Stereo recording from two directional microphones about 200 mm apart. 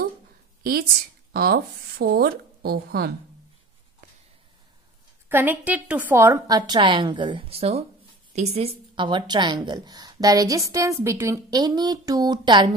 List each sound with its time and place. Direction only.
1.3 s speech: 50° right (ahead or behind)
5.3 s a woman's voice: 10° right (ahead or behind)